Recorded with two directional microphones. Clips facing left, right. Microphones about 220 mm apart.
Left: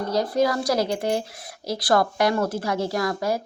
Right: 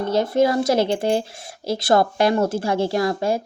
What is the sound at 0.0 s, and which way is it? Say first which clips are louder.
Speech: right 3 dB; 25° right (ahead or behind).